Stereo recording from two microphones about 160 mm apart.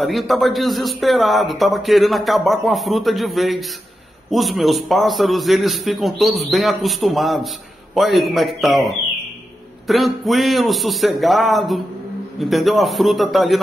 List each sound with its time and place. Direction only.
0.0 s a man's voice: centre (ahead or behind)